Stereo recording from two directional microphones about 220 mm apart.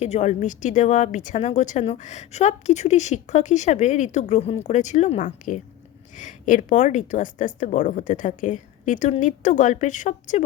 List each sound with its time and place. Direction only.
0.0 s a woman's voice: 30° left (ahead or behind)